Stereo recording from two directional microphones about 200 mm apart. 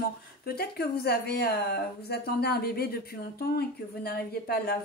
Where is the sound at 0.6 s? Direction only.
50° left (ahead or behind).